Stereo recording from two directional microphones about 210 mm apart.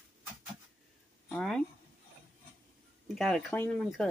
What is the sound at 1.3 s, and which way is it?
Speech, centre (ahead or behind).